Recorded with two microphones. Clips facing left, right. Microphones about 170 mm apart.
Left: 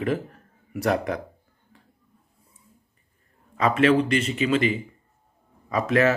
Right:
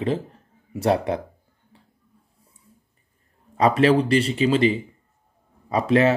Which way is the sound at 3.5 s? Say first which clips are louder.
Right 2 dB; 35° right (ahead or behind).